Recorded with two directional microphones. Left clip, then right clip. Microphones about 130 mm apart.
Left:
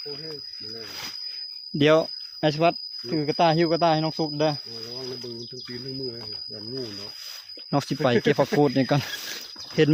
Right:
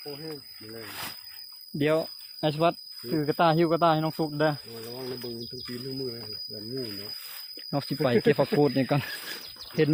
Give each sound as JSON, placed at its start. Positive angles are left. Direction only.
{"t": 1.8, "sound": "speech", "side_deg": 50}
{"t": 7.7, "sound": "speech", "side_deg": 55}
{"t": 8.0, "sound": "speech", "side_deg": 30}